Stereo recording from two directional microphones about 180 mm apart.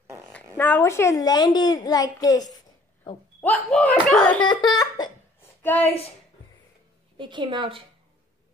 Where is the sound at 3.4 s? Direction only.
5° left (ahead or behind).